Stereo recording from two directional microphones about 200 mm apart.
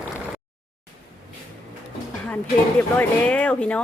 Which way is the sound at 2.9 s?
5° left (ahead or behind).